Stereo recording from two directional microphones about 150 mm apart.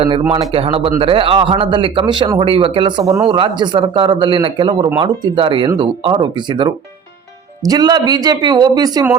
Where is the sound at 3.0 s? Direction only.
20° right (ahead or behind).